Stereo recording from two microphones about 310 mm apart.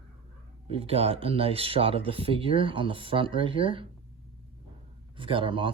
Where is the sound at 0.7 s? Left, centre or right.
Centre.